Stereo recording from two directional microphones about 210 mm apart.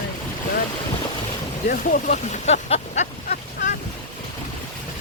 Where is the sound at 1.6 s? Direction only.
40° left (ahead or behind).